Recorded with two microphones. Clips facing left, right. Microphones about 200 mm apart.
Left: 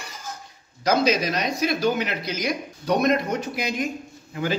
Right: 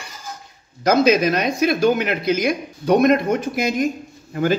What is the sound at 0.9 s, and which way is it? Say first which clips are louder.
Speech: right 6 dB; 55° right (ahead or behind).